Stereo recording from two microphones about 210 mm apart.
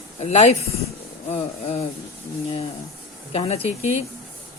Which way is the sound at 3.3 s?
30° left (ahead or behind).